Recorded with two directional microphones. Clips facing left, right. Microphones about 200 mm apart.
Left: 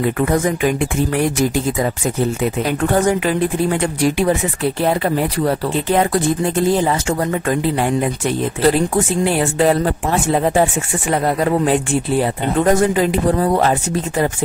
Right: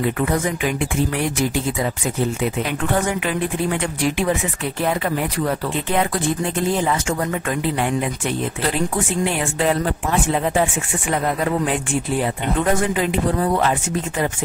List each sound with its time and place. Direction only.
0.2 s speech: 45° left (ahead or behind)